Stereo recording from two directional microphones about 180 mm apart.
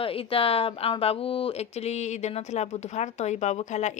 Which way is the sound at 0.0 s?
30° left (ahead or behind).